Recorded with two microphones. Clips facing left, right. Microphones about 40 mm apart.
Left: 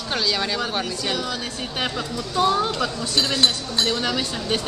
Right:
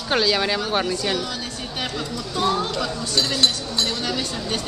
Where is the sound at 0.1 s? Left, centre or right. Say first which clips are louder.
Right 4 dB; centre.